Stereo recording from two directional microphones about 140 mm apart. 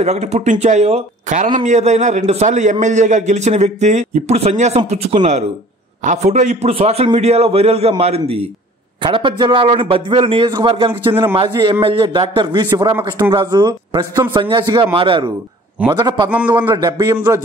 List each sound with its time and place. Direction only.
0.0 s a man's voice: 50° right (ahead or behind)
9.0 s a man's voice: 35° right (ahead or behind)